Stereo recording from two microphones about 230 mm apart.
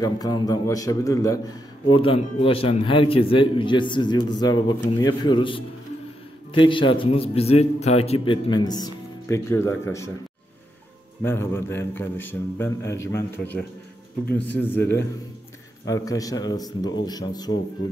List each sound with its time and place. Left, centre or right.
0.0 s a man's voice: centre
11.2 s a man's voice: centre